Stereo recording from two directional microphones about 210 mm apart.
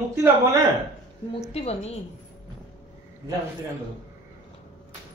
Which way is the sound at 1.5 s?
30° left (ahead or behind).